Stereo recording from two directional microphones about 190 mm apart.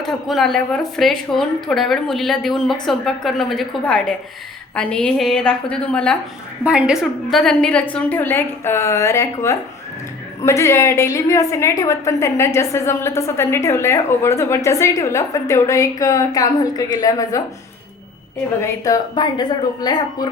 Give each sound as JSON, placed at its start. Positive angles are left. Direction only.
{"t": 0.0, "sound": "speech", "side_deg": 0}
{"t": 6.7, "sound": "a woman's voice", "side_deg": -5}
{"t": 18.6, "sound": "speech", "side_deg": 20}